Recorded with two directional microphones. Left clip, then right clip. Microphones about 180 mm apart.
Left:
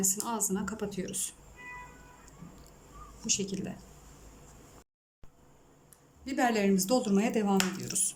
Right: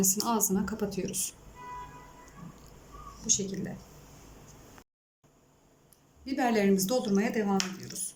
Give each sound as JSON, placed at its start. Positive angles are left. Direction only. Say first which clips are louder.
{"t": 0.3, "sound": "a woman's voice", "louder": "right 4 dB", "side_deg": 0}
{"t": 3.2, "sound": "speech", "louder": "right 2 dB", "side_deg": 10}
{"t": 6.2, "sound": "a woman's voice", "louder": "right 1 dB", "side_deg": 0}